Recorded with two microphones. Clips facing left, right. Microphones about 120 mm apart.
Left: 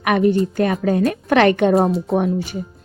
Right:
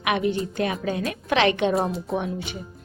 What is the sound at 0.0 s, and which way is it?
A woman's voice, 45° left (ahead or behind).